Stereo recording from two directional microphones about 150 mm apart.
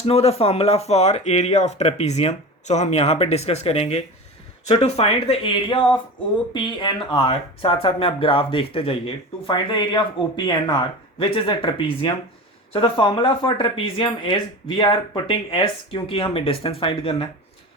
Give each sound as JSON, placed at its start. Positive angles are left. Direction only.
{"t": 0.0, "sound": "speech", "side_deg": 40}